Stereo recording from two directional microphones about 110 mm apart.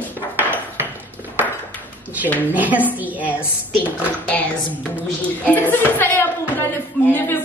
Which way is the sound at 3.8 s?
15° left (ahead or behind).